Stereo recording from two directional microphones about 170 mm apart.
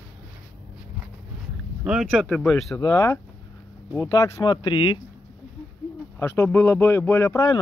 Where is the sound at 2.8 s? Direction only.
20° left (ahead or behind).